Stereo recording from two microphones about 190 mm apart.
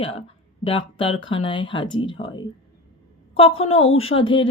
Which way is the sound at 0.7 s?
30° left (ahead or behind).